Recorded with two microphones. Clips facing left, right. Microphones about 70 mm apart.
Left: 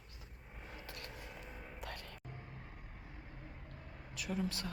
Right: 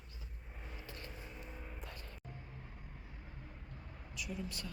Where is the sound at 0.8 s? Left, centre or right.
Left.